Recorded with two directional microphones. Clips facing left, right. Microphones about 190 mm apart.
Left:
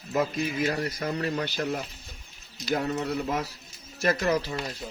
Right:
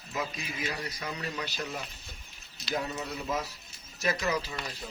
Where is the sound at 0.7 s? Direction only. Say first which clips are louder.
Left 8 dB; 50° left (ahead or behind).